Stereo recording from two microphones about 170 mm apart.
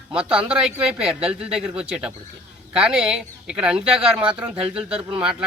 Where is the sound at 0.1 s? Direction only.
5° right (ahead or behind).